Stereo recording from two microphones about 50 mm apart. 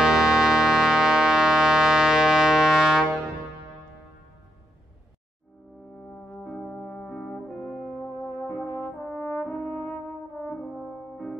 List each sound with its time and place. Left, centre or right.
0.0 s music: centre
6.1 s brass instrument: centre
8.0 s brass instrument: left
9.1 s brass instrument: left
10.6 s french horn: centre